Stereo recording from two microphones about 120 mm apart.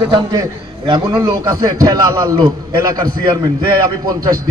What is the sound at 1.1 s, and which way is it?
A man's voice, 30° right (ahead or behind).